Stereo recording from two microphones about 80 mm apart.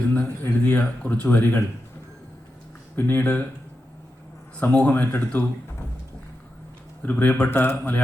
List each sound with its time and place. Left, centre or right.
0.1 s speech: centre
2.9 s speech: left
4.6 s speech: centre
7.0 s speech: centre